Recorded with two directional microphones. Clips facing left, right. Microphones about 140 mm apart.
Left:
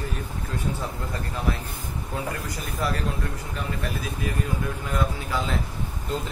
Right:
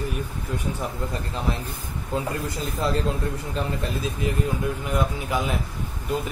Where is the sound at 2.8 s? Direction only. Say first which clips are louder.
Right 2 dB; 25° right (ahead or behind).